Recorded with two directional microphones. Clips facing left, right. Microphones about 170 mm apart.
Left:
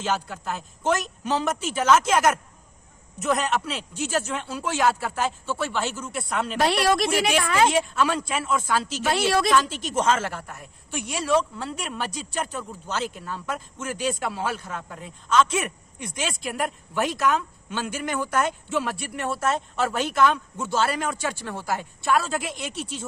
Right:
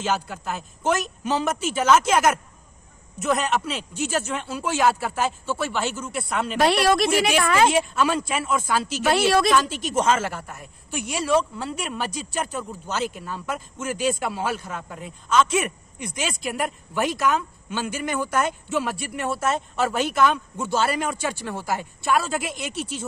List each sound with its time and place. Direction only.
0.0 s speech: 5° right (ahead or behind)
6.8 s a woman's voice: 70° right (ahead or behind)
7.7 s a woman's voice: 10° right (ahead or behind)
9.0 s a woman's voice: 75° right (ahead or behind)
9.5 s a woman's voice: 10° right (ahead or behind)